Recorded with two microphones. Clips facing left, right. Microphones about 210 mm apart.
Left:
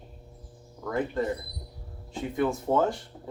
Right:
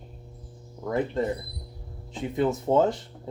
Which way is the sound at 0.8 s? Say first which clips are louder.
Right 2 dB; 25° right (ahead or behind).